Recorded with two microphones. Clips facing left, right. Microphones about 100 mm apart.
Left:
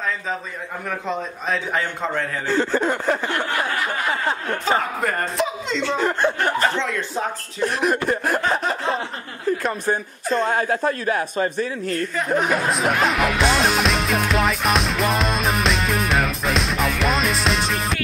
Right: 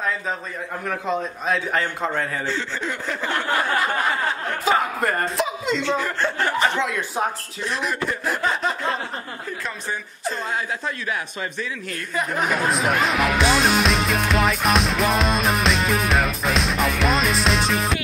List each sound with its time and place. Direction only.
0.8 s a man's voice: centre (ahead or behind)
2.4 s a woman's voice: 45° left (ahead or behind)
4.6 s speech: centre (ahead or behind)
6.2 s speech: 15° left (ahead or behind)
6.6 s speech: 10° right (ahead or behind)
7.6 s a woman's voice: 50° left (ahead or behind)
8.4 s a sound: centre (ahead or behind)
9.6 s a woman's voice: 50° left (ahead or behind)
12.2 s music: centre (ahead or behind)